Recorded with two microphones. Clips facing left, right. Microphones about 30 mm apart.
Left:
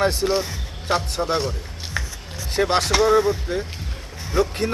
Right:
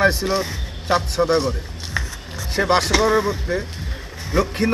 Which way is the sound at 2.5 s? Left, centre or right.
Centre.